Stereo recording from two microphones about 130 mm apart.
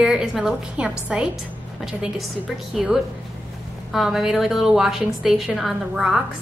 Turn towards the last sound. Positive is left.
turn(degrees=-5)  # may be behind; listen again after turning